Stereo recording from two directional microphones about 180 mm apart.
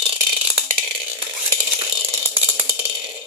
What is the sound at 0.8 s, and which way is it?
Stir, 25° right (ahead or behind).